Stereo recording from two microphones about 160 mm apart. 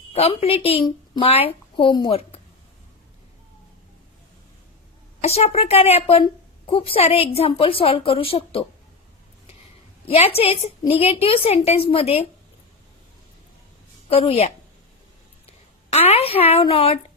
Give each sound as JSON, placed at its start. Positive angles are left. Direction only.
{"t": 0.1, "sound": "a woman's voice", "side_deg": 40}
{"t": 5.2, "sound": "a woman's voice", "side_deg": 40}
{"t": 10.1, "sound": "a woman's voice", "side_deg": 40}
{"t": 14.1, "sound": "a woman's voice", "side_deg": 40}
{"t": 15.9, "sound": "a woman's voice", "side_deg": 40}